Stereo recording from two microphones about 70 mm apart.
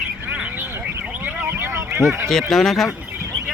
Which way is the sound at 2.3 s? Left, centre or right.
Centre.